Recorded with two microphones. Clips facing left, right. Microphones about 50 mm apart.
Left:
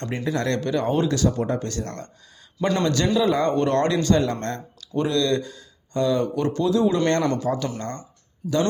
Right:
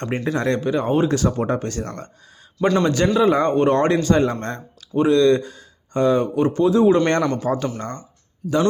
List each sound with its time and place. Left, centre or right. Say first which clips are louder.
0.3 s speech: right 3 dB; right
1.0 s a man's voice: right 3 dB; right
2.6 s a man's voice: right 5 dB; centre
2.8 s a man's voice: right 2 dB; right
4.4 s speech: right 1 dB; centre
7.8 s speech: right 2 dB; centre
8.4 s a man's voice: right 3 dB; centre